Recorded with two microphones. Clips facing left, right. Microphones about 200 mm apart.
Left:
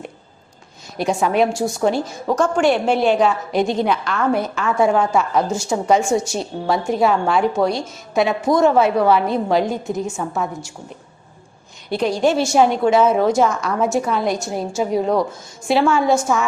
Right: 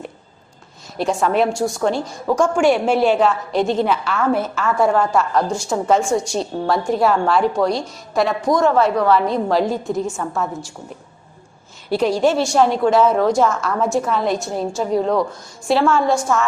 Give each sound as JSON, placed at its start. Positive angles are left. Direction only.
{"t": 0.9, "sound": "a woman's voice", "side_deg": 0}
{"t": 2.3, "sound": "a woman's voice", "side_deg": -10}
{"t": 11.9, "sound": "a woman's voice", "side_deg": -5}